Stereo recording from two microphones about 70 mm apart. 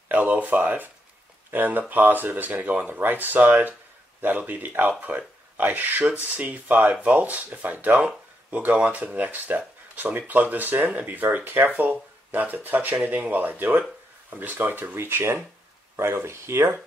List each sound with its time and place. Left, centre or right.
0.1 s speech: right